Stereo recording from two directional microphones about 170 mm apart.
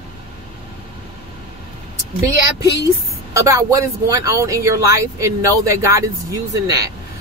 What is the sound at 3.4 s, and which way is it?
Speech, 20° right (ahead or behind).